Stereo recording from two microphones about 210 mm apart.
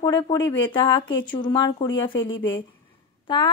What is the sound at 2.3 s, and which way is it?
Speech, 65° left (ahead or behind).